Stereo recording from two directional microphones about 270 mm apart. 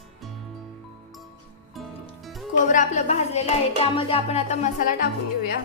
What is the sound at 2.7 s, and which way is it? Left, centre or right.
Hands, left.